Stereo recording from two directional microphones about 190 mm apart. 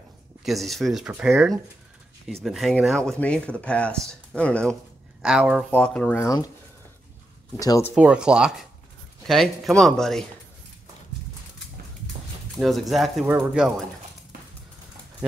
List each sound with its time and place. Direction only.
0.4 s speech: centre (ahead or behind)
5.2 s speech: 5° right (ahead or behind)
5.7 s speech: 5° left (ahead or behind)
7.5 s speech: 20° left (ahead or behind)
7.9 s speech: 5° right (ahead or behind)
12.5 s speech: centre (ahead or behind)